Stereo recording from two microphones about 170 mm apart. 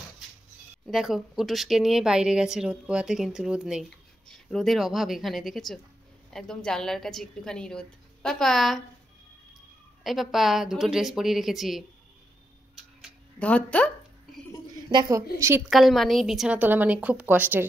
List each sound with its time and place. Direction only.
0.8 s speech: centre (ahead or behind)
10.0 s speech: centre (ahead or behind)
12.7 s tick-tock: 5° left (ahead or behind)
14.9 s a woman's voice: 20° right (ahead or behind)
15.7 s a woman's voice: centre (ahead or behind)